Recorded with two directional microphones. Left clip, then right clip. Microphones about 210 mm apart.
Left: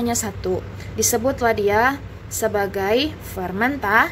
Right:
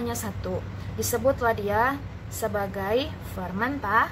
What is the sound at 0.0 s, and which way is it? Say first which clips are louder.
A woman's voice: left 8 dB; 30° left (ahead or behind).